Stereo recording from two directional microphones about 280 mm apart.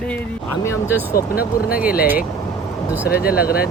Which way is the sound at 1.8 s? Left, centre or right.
Left.